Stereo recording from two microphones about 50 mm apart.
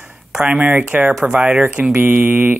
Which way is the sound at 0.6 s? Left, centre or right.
Right.